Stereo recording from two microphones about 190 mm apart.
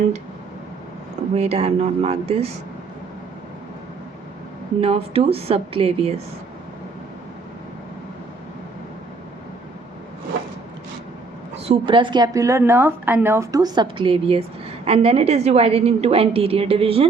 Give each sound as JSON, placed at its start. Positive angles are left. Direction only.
{"t": 1.4, "sound": "a woman's voice", "side_deg": -35}
{"t": 4.8, "sound": "a woman's voice", "side_deg": -30}
{"t": 11.5, "sound": "a woman's voice", "side_deg": -30}